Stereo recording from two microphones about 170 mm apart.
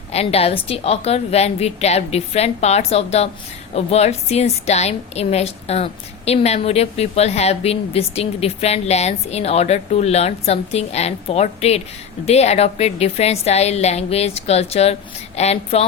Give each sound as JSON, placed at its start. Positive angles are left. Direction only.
{"t": 0.1, "sound": "a woman's voice", "side_deg": 35}